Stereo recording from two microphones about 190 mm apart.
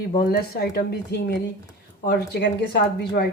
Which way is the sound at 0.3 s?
55° left (ahead or behind).